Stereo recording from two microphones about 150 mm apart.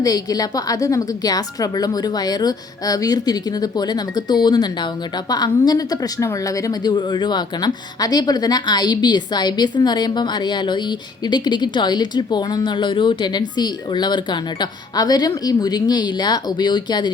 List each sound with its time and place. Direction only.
0.0 s a woman's voice: 25° left (ahead or behind)